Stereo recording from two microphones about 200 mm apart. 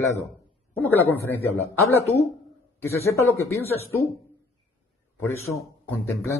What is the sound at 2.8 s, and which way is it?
Speech, 15° left (ahead or behind).